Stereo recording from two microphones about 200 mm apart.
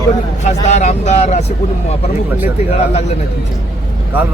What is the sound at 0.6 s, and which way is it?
Speech, 35° left (ahead or behind).